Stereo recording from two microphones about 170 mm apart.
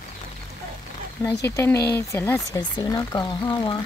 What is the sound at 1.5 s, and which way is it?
Speech, 15° left (ahead or behind).